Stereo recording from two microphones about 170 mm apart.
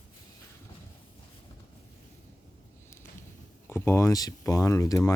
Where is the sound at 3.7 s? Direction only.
15° left (ahead or behind).